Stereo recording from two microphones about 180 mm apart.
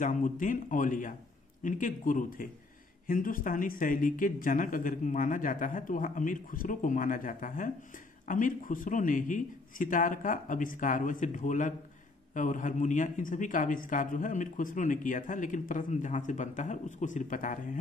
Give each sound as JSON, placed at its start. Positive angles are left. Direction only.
{"t": 0.0, "sound": "speech", "side_deg": 45}